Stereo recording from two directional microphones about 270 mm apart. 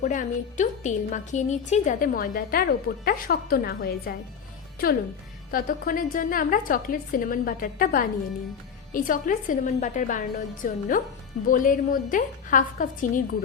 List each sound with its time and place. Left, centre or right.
0.0 s a woman's voice: left
5.5 s a woman's voice: left